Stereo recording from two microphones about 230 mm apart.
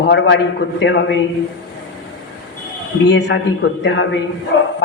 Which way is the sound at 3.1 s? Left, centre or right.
Left.